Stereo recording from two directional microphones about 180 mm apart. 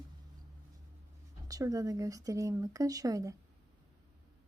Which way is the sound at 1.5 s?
20° right (ahead or behind).